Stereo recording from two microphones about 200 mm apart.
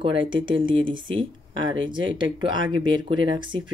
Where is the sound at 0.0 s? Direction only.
25° right (ahead or behind).